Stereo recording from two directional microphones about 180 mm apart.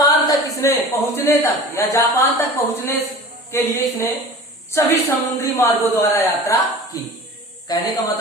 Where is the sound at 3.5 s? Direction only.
15° left (ahead or behind).